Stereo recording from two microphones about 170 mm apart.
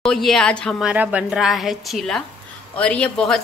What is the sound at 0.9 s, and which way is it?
A woman's voice, 10° right (ahead or behind).